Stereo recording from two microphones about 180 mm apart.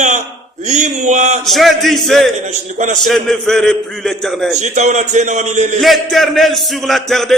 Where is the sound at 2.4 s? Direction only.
40° right (ahead or behind).